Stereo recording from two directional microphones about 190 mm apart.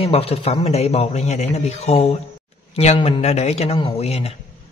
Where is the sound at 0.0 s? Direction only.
30° left (ahead or behind).